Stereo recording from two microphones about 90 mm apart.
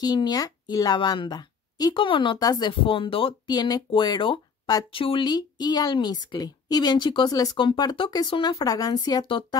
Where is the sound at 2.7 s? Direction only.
75° left (ahead or behind).